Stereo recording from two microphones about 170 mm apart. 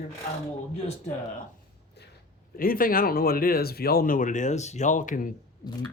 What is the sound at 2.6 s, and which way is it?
Speech, 55° left (ahead or behind).